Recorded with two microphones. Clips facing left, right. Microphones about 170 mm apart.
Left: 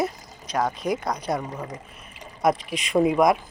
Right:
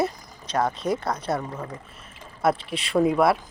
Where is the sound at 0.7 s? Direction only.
30° right (ahead or behind).